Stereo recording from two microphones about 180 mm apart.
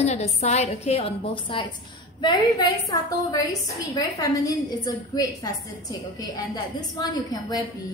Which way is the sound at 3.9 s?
20° left (ahead or behind).